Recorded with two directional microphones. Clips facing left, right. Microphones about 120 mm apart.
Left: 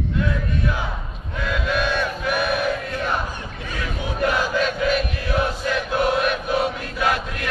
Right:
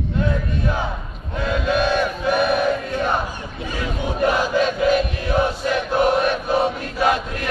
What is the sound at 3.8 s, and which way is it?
Crowd, 25° right (ahead or behind).